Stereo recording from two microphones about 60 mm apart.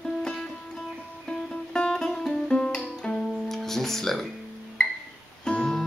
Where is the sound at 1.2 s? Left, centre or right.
Centre.